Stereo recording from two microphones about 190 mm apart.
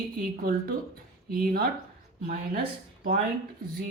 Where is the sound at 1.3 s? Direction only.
50° right (ahead or behind).